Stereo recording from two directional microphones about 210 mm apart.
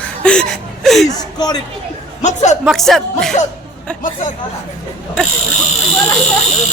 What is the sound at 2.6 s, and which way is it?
Speech, centre (ahead or behind).